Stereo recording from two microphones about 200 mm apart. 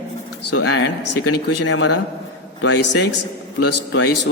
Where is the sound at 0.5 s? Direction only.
80° left; by 3.2 s 60° left (ahead or behind).